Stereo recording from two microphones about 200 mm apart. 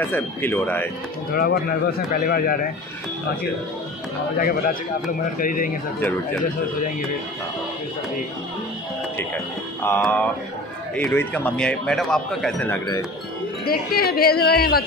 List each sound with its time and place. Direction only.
0.0 s a man's voice: 10° left (ahead or behind)
1.3 s speech: 50° left (ahead or behind)
4.4 s speech: 45° left (ahead or behind)
9.8 s a man's voice: 10° left (ahead or behind)
13.7 s speech: 50° left (ahead or behind)